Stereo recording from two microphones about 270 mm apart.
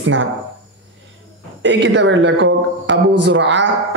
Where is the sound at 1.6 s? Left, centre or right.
Right.